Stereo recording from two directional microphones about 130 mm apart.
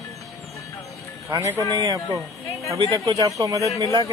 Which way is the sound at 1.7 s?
30° right (ahead or behind).